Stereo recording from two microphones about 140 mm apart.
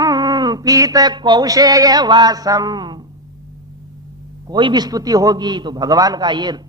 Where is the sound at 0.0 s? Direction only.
30° right (ahead or behind).